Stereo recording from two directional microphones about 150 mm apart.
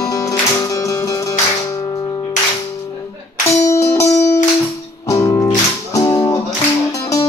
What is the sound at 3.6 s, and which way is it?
Music, 20° left (ahead or behind).